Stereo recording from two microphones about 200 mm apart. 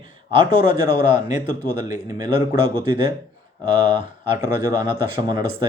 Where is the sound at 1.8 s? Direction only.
20° right (ahead or behind).